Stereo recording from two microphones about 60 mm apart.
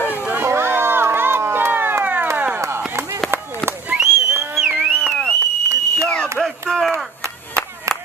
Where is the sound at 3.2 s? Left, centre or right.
Right.